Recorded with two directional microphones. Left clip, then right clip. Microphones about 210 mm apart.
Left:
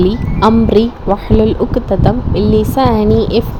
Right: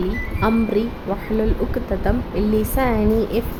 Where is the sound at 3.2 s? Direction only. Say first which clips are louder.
Left 8 dB; 5° right (ahead or behind).